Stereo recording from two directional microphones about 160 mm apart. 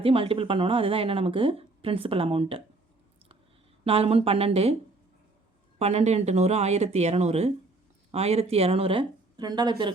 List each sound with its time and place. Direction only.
0.0 s speech: 35° right (ahead or behind)
3.8 s speech: 40° right (ahead or behind)
5.8 s speech: 45° right (ahead or behind)